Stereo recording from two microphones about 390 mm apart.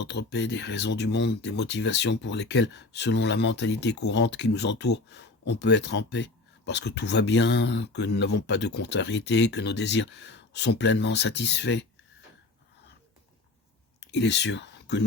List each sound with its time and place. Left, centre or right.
0.0 s speech: left
14.0 s speech: left